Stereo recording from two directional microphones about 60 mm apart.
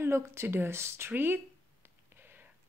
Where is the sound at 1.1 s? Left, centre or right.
Right.